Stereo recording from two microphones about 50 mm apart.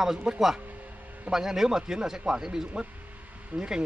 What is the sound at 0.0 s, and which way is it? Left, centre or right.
Speech, centre.